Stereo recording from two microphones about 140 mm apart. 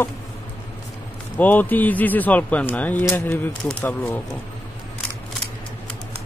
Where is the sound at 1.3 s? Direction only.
10° left (ahead or behind).